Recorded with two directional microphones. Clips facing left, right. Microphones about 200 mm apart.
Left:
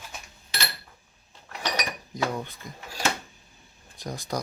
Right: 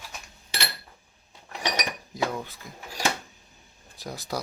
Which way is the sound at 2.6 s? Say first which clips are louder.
Left 2 dB; 5° right (ahead or behind).